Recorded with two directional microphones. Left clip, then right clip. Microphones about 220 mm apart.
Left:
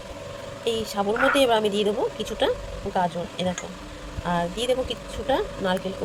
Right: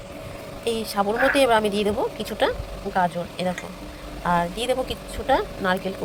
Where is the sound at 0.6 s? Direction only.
Centre (ahead or behind).